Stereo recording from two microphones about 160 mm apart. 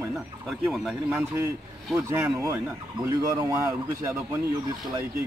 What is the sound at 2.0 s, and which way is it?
Speech, 15° right (ahead or behind).